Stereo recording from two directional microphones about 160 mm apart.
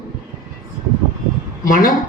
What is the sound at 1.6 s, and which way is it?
Speech, 60° left (ahead or behind).